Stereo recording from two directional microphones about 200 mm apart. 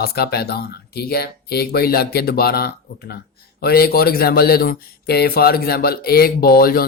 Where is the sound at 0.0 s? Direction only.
50° left (ahead or behind).